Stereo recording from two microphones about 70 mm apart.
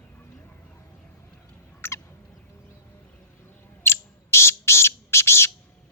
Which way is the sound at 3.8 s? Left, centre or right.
Left.